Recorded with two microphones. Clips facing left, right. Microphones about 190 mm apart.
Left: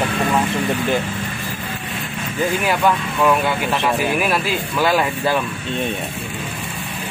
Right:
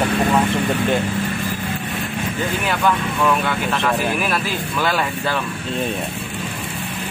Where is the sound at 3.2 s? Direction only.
5° left (ahead or behind).